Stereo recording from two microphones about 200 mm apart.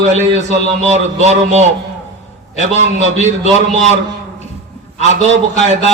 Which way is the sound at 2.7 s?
35° right (ahead or behind).